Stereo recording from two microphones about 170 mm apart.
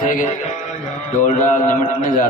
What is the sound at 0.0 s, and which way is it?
Music, 50° left (ahead or behind).